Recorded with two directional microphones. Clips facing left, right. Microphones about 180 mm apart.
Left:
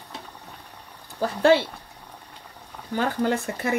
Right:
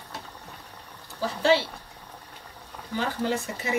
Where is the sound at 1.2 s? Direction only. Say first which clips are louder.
Left 4 dB; 55° left (ahead or behind).